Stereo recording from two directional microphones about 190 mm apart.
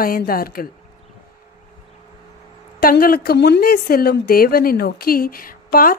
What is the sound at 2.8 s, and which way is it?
A woman's voice, 50° left (ahead or behind).